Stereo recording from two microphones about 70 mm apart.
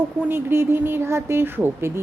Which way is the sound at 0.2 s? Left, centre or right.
Right.